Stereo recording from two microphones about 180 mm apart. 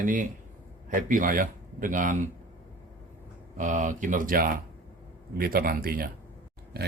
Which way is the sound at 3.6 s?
45° right (ahead or behind).